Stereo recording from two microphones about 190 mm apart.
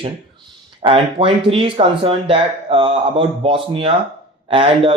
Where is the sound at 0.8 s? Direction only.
30° right (ahead or behind).